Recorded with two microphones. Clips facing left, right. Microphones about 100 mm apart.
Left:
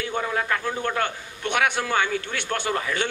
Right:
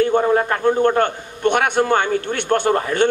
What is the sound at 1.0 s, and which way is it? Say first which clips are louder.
A man's voice: right 9 dB; 50° right (ahead or behind).